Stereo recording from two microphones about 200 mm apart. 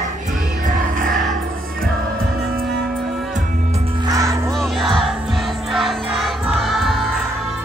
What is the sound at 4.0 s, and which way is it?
Music, 15° right (ahead or behind).